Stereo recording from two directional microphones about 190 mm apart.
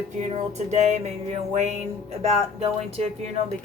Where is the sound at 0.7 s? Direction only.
35° right (ahead or behind).